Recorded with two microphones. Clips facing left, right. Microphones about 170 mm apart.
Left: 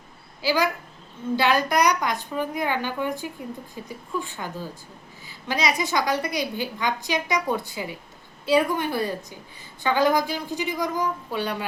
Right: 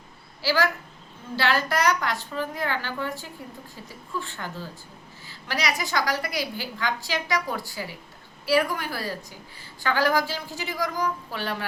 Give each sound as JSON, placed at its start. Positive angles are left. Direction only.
{"t": 0.4, "sound": "a woman's voice", "side_deg": 15}
{"t": 5.2, "sound": "a sound", "side_deg": 20}
{"t": 5.9, "sound": "a woman's voice", "side_deg": 20}